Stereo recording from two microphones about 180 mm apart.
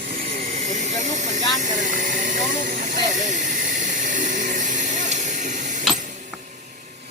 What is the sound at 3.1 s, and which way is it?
Hiss, 45° right (ahead or behind).